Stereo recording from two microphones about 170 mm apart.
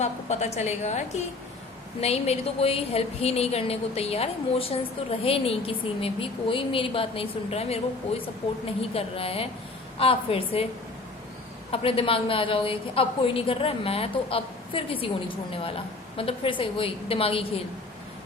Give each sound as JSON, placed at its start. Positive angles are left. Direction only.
{"t": 0.0, "sound": "a woman's voice", "side_deg": 40}
{"t": 11.7, "sound": "a woman's voice", "side_deg": 35}